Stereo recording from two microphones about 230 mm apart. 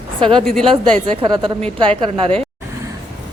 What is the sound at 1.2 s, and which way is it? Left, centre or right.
A woman's voice, right.